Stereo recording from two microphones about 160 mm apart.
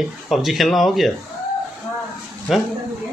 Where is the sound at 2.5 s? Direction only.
Centre (ahead or behind).